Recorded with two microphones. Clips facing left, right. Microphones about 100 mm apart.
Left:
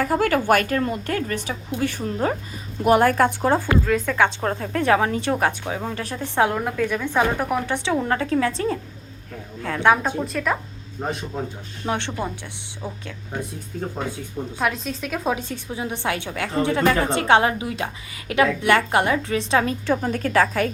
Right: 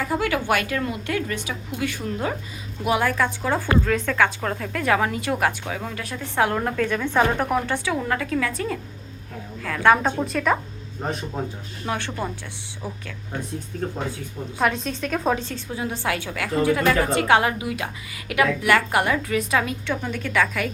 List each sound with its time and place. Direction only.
0.0 s a woman's voice: 45° left (ahead or behind)
2.8 s a woman's voice: 45° left (ahead or behind)
3.8 s a woman's voice: 5° left (ahead or behind)
4.2 s a woman's voice: 25° left (ahead or behind)
6.5 s a woman's voice: 5° left (ahead or behind)
7.7 s a woman's voice: 20° left (ahead or behind)
10.2 s a woman's voice: centre (ahead or behind)
11.9 s a woman's voice: 20° left (ahead or behind)
14.6 s a woman's voice: centre (ahead or behind); by 20.7 s 35° left (ahead or behind)